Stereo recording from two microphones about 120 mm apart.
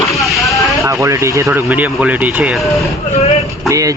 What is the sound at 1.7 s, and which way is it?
Speech, 10° right (ahead or behind).